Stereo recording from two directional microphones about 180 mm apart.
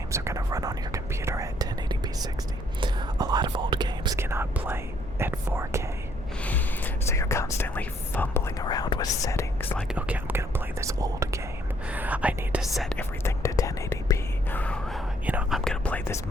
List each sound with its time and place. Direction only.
0.1 s whispering: 15° right (ahead or behind)
5.2 s speech: 15° right (ahead or behind)
6.4 s whispering: 10° left (ahead or behind)
9.9 s whispering: 10° right (ahead or behind)
11.9 s speech: 10° right (ahead or behind)
13.2 s whispering: 15° left (ahead or behind)